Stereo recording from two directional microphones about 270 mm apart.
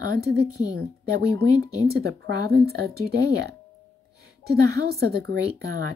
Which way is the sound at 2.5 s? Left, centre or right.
Right.